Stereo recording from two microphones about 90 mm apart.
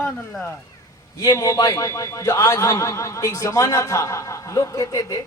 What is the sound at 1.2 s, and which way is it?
A man's voice, 40° left (ahead or behind).